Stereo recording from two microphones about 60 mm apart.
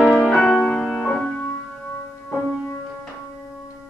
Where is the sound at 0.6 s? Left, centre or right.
Left.